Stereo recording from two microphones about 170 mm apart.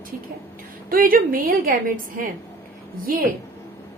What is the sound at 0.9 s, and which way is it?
Speech, 55° right (ahead or behind).